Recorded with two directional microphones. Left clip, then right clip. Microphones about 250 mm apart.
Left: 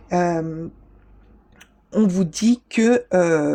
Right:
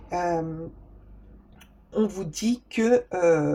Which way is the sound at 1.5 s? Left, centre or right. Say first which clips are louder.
Left 4 dB; left.